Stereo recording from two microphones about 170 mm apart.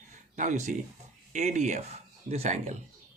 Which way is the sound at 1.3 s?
45° right (ahead or behind).